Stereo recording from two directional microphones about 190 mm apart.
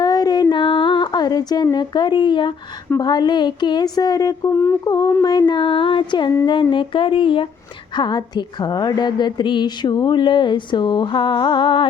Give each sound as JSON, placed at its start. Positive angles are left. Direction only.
{"t": 0.0, "sound": "music", "side_deg": 20}
{"t": 0.5, "sound": "a sound", "side_deg": 25}
{"t": 3.0, "sound": "speech", "side_deg": 20}